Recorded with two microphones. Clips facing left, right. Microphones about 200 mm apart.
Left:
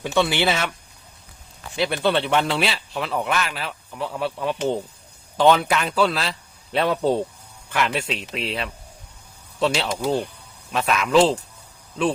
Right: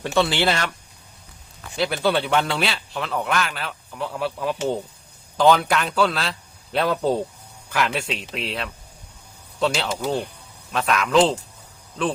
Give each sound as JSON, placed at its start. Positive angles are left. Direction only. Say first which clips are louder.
{"t": 0.0, "sound": "speech", "louder": "even", "side_deg": 0}
{"t": 1.7, "sound": "speech", "louder": "even", "side_deg": 0}